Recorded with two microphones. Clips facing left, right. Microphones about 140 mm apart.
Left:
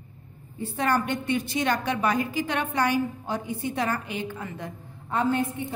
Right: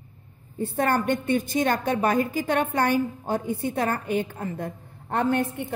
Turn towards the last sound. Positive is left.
turn(degrees=-60)  # may be behind; listen again after turning